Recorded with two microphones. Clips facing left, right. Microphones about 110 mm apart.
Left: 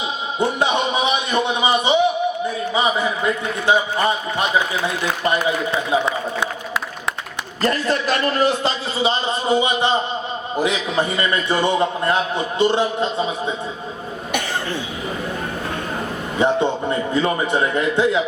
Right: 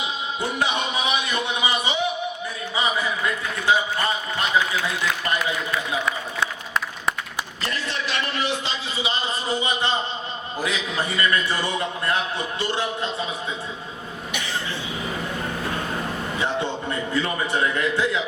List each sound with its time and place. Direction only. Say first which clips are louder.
0.3 s a sound: left 6 dB; 20° left (ahead or behind)
3.7 s a man's voice: left 4 dB; 20° left (ahead or behind)
7.6 s a man's voice: left 11 dB; 45° left (ahead or behind)
9.5 s a man's voice: left 7 dB; 20° left (ahead or behind)
16.4 s a man's voice: left 9 dB; 20° left (ahead or behind)